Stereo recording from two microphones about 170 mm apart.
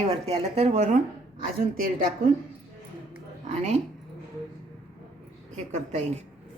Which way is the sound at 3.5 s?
40° right (ahead or behind).